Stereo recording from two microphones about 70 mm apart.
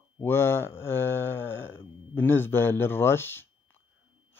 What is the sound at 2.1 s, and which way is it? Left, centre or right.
Speech, left.